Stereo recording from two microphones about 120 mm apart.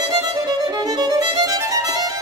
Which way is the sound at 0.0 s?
30° right (ahead or behind).